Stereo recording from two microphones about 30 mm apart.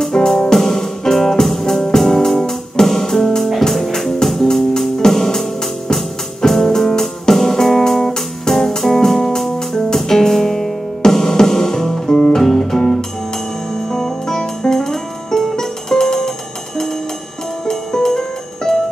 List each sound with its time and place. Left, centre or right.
0.0 s music: centre
17.6 s music: centre